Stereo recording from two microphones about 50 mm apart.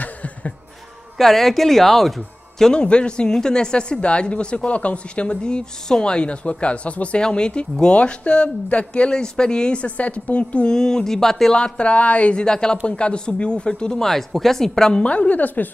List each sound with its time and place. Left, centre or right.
0.0 s chuckle: left
1.1 s speech: centre
2.7 s a woman's voice: centre
11.5 s a woman's voice: centre
15.0 s a woman's voice: left